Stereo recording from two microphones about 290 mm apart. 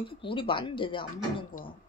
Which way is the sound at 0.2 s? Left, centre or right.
Centre.